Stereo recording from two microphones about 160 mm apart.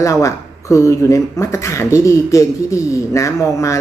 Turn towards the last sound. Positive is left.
turn(degrees=20)  # may be behind; listen again after turning